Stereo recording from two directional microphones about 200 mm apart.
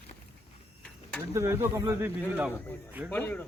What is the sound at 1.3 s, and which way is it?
Speech, 15° right (ahead or behind).